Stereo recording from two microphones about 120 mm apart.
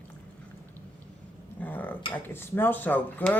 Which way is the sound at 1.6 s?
15° left (ahead or behind).